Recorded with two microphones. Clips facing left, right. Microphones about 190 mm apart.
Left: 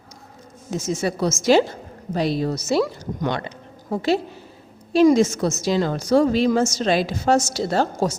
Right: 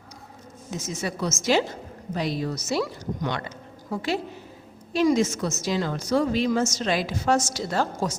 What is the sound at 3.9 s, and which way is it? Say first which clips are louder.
Speech: left 7 dB; 25° left (ahead or behind).